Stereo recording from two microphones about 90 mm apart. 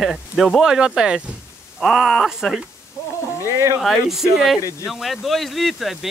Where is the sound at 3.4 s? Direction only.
35° right (ahead or behind).